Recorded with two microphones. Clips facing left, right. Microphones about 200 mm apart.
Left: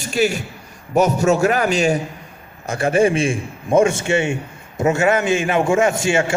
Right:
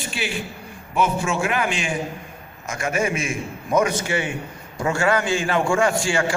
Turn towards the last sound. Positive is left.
turn(degrees=20)  # may be behind; listen again after turning